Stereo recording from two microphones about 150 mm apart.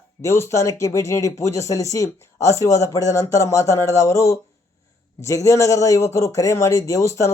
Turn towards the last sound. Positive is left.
turn(degrees=20)  # may be behind; listen again after turning